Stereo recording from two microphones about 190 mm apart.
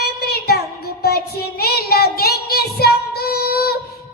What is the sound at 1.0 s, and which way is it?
Child singing, 55° left (ahead or behind).